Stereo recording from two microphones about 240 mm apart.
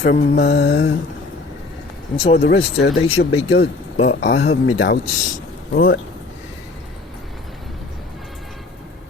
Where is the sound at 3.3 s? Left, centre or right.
Left.